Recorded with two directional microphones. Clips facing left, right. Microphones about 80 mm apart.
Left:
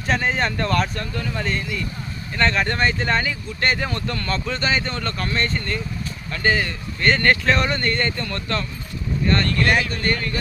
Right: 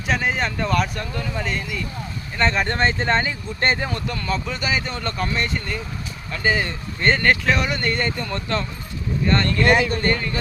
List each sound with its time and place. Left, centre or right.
0.1 s speech: centre
2.4 s speech: centre
3.8 s speech: centre
7.2 s speech: centre
9.6 s speech: right